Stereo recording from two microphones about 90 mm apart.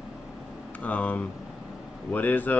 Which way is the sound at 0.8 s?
15° left (ahead or behind).